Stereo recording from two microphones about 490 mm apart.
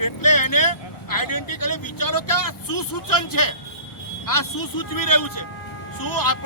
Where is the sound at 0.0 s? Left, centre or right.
Left.